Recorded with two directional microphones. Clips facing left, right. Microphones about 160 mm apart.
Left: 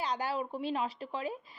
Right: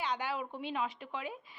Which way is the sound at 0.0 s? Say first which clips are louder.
Left 2 dB; 35° left (ahead or behind).